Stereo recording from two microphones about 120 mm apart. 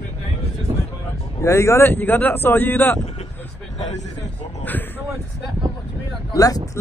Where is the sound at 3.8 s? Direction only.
75° left (ahead or behind).